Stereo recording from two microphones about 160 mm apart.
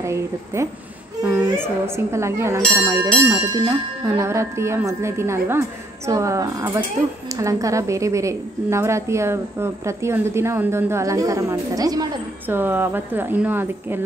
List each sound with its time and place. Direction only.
0.0 s a woman's voice: 20° right (ahead or behind)
12.4 s speech: 10° right (ahead or behind)